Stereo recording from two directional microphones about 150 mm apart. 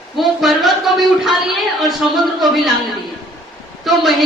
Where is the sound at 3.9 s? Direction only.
Centre (ahead or behind).